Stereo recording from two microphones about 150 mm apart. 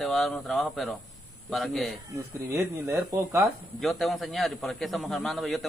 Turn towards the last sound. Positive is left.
turn(degrees=0)  # may be behind; listen again after turning